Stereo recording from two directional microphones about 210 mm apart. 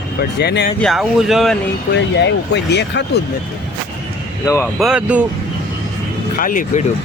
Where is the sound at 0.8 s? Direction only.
Centre (ahead or behind).